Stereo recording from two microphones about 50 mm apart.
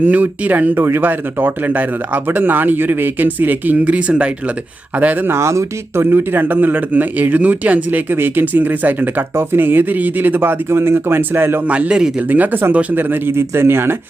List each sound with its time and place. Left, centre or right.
0.0 s speech: right
3.9 s a man's voice: right
5.4 s speech: right
6.1 s speech: right
8.1 s speech: right
9.3 s speech: right
11.7 s a man's voice: right
12.3 s speech: right
13.0 s speech: right